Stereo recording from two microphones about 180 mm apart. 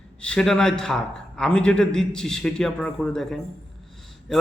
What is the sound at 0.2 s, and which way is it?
A man's voice, 5° left (ahead or behind).